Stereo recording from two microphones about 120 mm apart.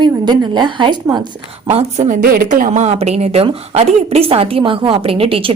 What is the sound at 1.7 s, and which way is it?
A woman's voice, 60° right (ahead or behind).